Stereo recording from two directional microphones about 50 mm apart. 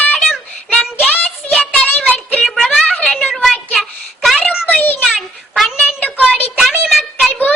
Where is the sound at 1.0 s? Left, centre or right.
Left.